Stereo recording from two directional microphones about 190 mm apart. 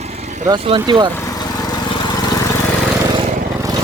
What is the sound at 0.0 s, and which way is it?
Vehicle, 35° right (ahead or behind).